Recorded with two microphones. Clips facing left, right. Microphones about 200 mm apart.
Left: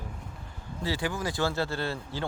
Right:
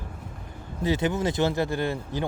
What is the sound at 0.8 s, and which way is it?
Speech, 20° right (ahead or behind).